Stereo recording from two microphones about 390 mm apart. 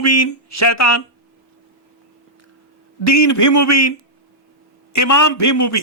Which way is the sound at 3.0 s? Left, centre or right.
Left.